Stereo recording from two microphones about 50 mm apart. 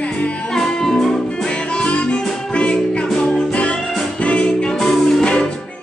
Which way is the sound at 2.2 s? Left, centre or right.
Centre.